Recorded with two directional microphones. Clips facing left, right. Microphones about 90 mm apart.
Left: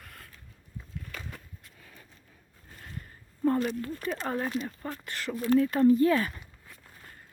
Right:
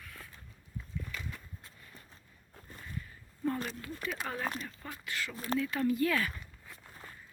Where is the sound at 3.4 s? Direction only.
40° left (ahead or behind).